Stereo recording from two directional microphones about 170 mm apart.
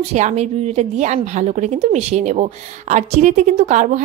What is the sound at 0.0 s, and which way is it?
A woman's voice, 40° right (ahead or behind).